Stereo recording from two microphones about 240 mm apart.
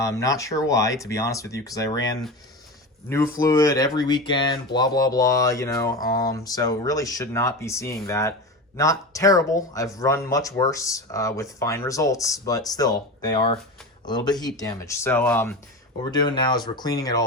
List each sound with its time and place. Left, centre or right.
0.0 s speech: centre